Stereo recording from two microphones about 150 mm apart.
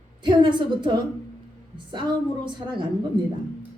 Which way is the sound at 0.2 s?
30° right (ahead or behind).